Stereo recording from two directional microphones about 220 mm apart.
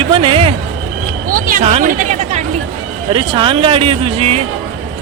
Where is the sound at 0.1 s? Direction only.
25° right (ahead or behind).